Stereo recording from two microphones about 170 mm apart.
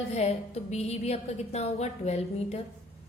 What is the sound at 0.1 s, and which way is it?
A woman's voice, 40° left (ahead or behind).